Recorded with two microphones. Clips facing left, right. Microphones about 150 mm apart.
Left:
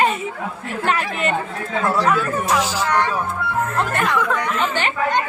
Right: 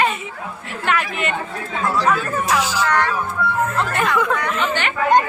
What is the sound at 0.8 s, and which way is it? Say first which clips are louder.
Speech: even; 35° left (ahead or behind).